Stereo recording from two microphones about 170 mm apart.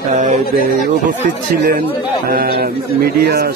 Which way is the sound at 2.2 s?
60° right (ahead or behind).